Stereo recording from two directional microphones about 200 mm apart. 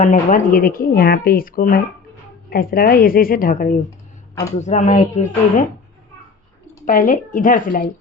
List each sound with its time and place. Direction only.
0.0 s speech: 40° left (ahead or behind)
6.8 s speech: 40° left (ahead or behind)